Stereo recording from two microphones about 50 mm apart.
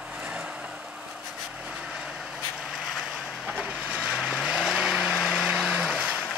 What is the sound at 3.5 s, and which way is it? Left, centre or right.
Vehicle, right.